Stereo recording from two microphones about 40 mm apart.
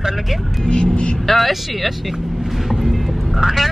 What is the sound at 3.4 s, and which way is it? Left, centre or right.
Speech, centre.